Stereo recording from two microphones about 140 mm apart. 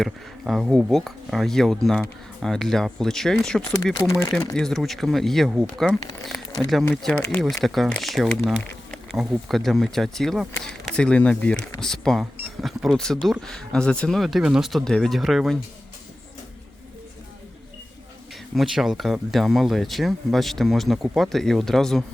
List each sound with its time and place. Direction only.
0.0 s speech: centre (ahead or behind)
3.9 s speech: 25° left (ahead or behind)
4.5 s speech: 5° left (ahead or behind)
18.5 s speech: centre (ahead or behind)